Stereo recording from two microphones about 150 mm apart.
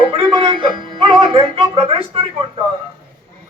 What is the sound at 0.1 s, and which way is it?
Music, 35° right (ahead or behind).